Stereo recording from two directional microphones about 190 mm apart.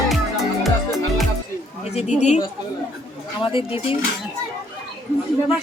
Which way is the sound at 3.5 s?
30° left (ahead or behind).